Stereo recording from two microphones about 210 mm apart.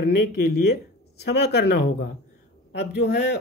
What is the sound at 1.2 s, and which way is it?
Speech, 50° left (ahead or behind).